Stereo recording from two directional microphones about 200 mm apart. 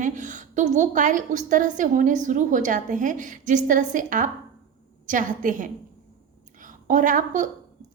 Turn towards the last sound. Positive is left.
turn(degrees=-40)  # may be behind; listen again after turning